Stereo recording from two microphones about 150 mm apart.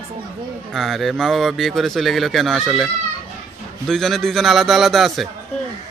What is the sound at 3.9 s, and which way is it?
A man's voice, centre (ahead or behind).